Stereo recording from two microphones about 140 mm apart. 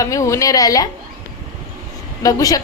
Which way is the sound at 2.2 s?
25° left (ahead or behind).